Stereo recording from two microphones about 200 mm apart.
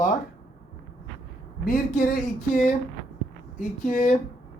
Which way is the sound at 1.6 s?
45° left (ahead or behind).